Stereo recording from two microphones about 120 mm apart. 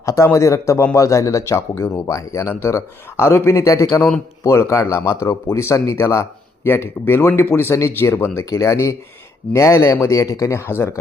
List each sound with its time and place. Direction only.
0.0 s speech: 25° left (ahead or behind)